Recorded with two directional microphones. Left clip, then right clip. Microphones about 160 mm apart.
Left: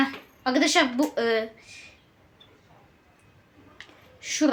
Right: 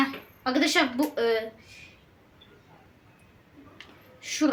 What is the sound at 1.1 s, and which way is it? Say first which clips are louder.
Speech: left 1 dB; 25° left (ahead or behind).